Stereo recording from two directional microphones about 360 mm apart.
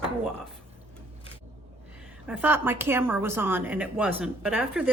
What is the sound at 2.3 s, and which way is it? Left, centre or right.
Speech, centre.